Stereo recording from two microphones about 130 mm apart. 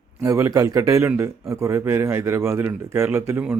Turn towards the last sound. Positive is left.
turn(degrees=-20)  # may be behind; listen again after turning